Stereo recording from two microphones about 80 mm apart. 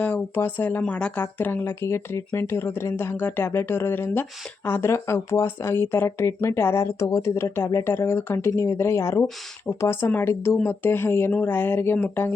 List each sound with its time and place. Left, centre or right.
0.0 s speech: left
1.2 s speech: left
7.0 s speech: left